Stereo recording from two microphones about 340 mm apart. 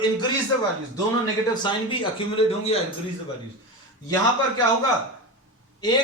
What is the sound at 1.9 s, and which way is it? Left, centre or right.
Speech, centre.